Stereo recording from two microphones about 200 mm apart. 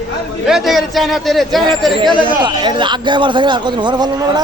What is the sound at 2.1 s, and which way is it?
A man's voice, 25° right (ahead or behind).